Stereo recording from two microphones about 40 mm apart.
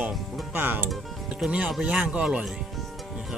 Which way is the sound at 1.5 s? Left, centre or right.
Right.